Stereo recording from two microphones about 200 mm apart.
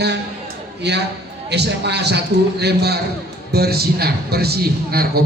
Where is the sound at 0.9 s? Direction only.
55° right (ahead or behind).